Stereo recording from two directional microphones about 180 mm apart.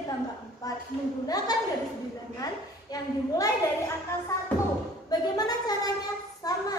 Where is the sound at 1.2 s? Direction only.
20° left (ahead or behind).